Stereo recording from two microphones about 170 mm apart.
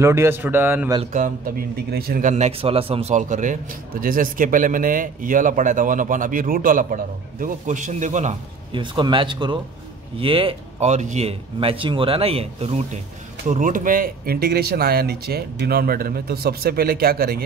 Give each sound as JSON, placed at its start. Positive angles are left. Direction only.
{"t": 0.0, "sound": "a man's voice", "side_deg": -15}
{"t": 1.1, "sound": "a man's voice", "side_deg": -55}
{"t": 8.7, "sound": "a man's voice", "side_deg": -30}
{"t": 13.5, "sound": "speech", "side_deg": -50}